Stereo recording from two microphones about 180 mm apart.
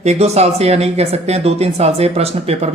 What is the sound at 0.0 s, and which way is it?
Speech, 35° right (ahead or behind).